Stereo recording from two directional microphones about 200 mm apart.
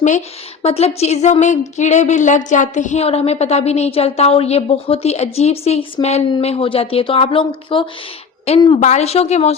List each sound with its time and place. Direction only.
0.6 s speech: 30° left (ahead or behind)